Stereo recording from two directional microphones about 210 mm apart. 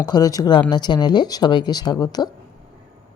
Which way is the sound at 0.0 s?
20° left (ahead or behind).